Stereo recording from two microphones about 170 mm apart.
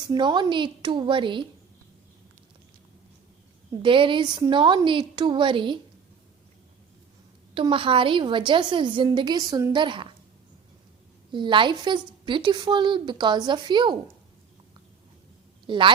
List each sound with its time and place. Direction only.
0.0 s a woman's voice: 25° right (ahead or behind)
3.8 s a woman's voice: 30° right (ahead or behind)
7.5 s a woman's voice: 30° right (ahead or behind)
11.3 s a woman's voice: 30° right (ahead or behind)
15.6 s a woman's voice: 30° right (ahead or behind)